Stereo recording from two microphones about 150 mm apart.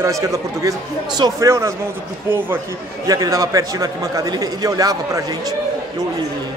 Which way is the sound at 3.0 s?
25° right (ahead or behind).